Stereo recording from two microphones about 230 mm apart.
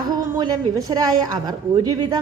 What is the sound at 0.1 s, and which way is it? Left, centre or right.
A woman's voice, centre.